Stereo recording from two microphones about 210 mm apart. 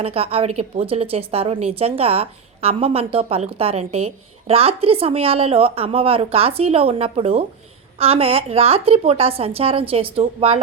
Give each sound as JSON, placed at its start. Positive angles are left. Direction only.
{"t": 0.0, "sound": "a woman's voice", "side_deg": -30}